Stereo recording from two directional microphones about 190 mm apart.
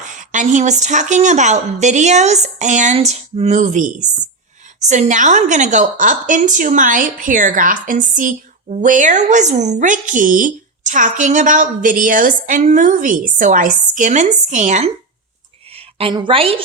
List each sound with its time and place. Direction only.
0.0 s a woman's voice: 40° right (ahead or behind)